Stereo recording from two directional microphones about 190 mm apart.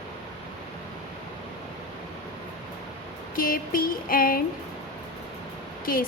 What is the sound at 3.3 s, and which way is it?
Music, 45° left (ahead or behind).